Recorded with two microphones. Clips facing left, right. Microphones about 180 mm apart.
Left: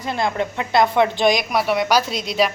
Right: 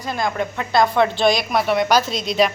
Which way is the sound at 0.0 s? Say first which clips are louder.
Left 1 dB; 25° left (ahead or behind).